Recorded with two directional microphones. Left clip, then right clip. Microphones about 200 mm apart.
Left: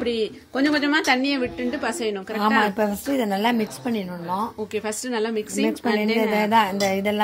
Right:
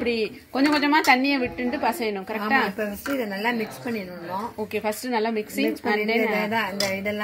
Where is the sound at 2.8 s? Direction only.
50° left (ahead or behind).